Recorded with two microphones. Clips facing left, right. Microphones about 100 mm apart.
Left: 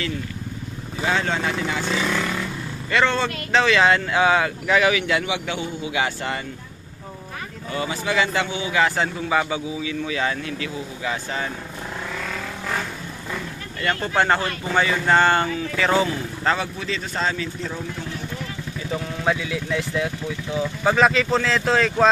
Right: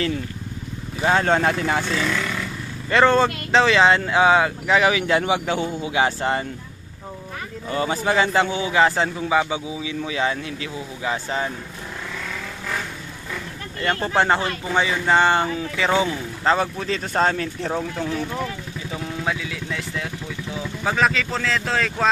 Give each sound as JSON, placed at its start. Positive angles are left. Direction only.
{"t": 1.0, "sound": "speech", "side_deg": -40}
{"t": 1.8, "sound": "speech", "side_deg": 15}
{"t": 2.9, "sound": "speech", "side_deg": -40}
{"t": 7.7, "sound": "speech", "side_deg": -35}
{"t": 13.9, "sound": "speech", "side_deg": -30}
{"t": 15.4, "sound": "speech", "side_deg": -30}
{"t": 15.8, "sound": "speech", "side_deg": -15}
{"t": 16.6, "sound": "speech", "side_deg": -45}
{"t": 19.2, "sound": "speech", "side_deg": 0}